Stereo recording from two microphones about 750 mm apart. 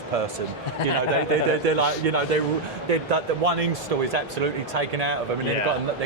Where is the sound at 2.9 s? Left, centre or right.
Right.